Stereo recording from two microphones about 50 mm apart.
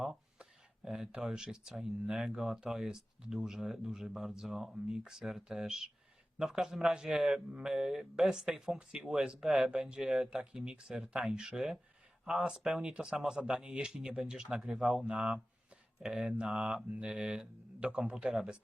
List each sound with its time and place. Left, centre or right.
0.9 s speech: centre
11.4 s speech: centre
15.1 s speech: centre